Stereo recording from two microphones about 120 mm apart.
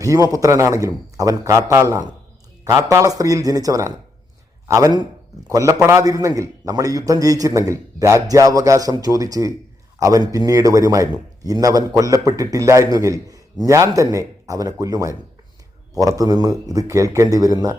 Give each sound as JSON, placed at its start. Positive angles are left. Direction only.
{"t": 0.0, "sound": "a man's voice", "side_deg": -30}